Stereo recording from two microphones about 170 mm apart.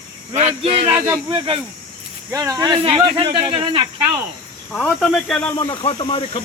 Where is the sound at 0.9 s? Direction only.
15° right (ahead or behind); by 3.8 s 30° right (ahead or behind).